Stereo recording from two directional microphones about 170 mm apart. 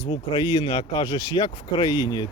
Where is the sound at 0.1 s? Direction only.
30° left (ahead or behind).